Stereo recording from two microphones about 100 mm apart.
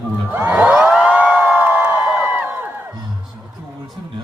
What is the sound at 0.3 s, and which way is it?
Crowd, 15° right (ahead or behind).